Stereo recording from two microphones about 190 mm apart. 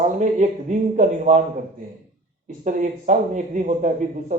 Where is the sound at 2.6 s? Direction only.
40° right (ahead or behind).